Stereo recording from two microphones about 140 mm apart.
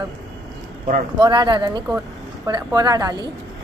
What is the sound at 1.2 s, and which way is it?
A woman's voice, 35° right (ahead or behind).